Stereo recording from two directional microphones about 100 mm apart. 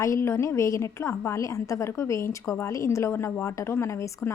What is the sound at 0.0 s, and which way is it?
A woman's voice, 30° left (ahead or behind).